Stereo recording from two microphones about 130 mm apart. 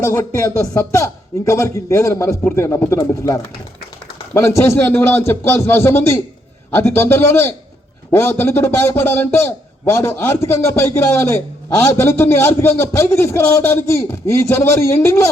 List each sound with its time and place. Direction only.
0.1 s a man's voice: 20° left (ahead or behind)
4.4 s a man's voice: 20° left (ahead or behind)